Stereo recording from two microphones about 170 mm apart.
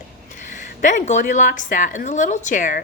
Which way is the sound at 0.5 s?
50° left (ahead or behind).